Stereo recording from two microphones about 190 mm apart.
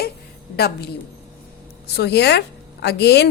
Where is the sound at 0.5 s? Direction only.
55° left (ahead or behind).